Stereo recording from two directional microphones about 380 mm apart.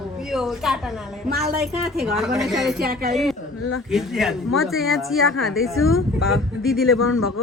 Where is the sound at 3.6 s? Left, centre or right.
Left.